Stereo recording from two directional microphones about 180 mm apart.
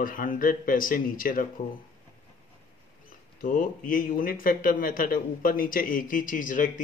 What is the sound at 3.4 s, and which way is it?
Speech, 50° left (ahead or behind).